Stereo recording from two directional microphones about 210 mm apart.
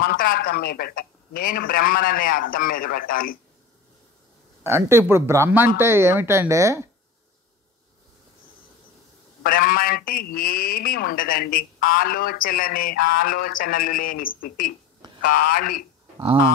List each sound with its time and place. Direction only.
0.0 s a man's voice: 45° left (ahead or behind)
4.6 s speech: 10° right (ahead or behind)
9.4 s a man's voice: 40° left (ahead or behind)
15.0 s a sound: 20° right (ahead or behind)
16.2 s speech: 25° right (ahead or behind)